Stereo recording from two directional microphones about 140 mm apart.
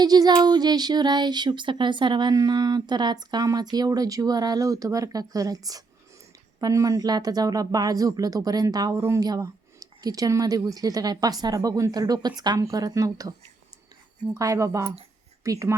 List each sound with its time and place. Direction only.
0.0 s speech: 30° right (ahead or behind)
14.3 s speech: 25° right (ahead or behind)